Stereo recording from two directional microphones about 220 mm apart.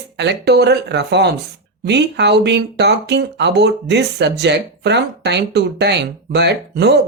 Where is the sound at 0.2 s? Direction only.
50° right (ahead or behind).